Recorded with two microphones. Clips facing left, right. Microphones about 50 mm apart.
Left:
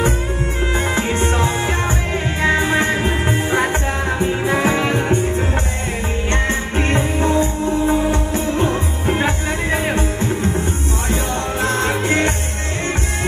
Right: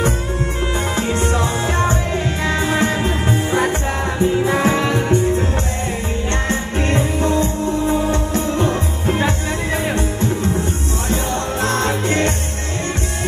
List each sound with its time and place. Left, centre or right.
0.9 s music: left
6.3 s music: left
11.6 s music: centre